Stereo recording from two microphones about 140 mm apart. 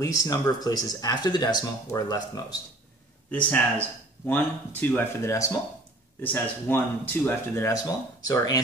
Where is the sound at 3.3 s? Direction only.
10° left (ahead or behind).